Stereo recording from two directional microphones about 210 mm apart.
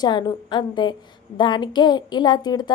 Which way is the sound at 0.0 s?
20° left (ahead or behind).